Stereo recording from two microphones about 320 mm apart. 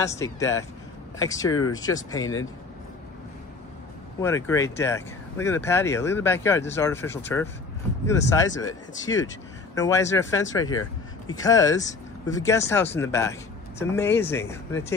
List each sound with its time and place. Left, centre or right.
0.2 s speech: centre
4.2 s speech: centre
10.6 s vehicle: left
11.4 s speech: centre